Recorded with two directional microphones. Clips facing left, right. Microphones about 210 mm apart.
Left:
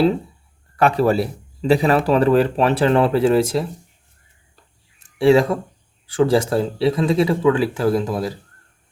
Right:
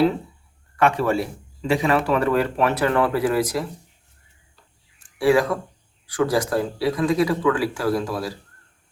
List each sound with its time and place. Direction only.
0.8 s speech: 35° left (ahead or behind)
5.1 s speech: 25° left (ahead or behind)